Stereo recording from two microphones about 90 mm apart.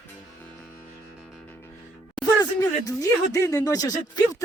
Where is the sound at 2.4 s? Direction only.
40° left (ahead or behind).